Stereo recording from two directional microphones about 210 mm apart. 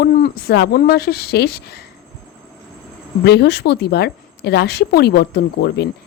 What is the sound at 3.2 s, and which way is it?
A woman's voice, 55° left (ahead or behind).